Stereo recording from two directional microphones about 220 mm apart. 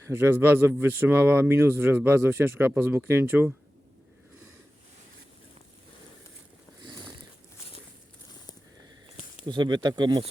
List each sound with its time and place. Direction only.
0.1 s speech: 10° right (ahead or behind)
9.5 s speech: 20° right (ahead or behind)